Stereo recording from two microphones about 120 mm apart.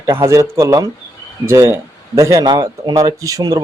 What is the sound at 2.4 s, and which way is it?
Speech, 40° right (ahead or behind).